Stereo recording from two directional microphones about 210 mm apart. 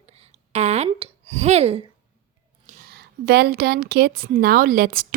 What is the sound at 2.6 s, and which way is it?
A woman's voice, 50° right (ahead or behind).